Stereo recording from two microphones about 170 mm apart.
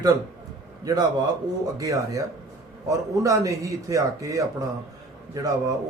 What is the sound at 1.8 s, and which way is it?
A man's voice, 20° right (ahead or behind).